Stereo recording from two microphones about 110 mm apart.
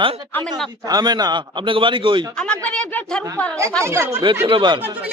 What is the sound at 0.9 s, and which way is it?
A man's voice, 35° right (ahead or behind).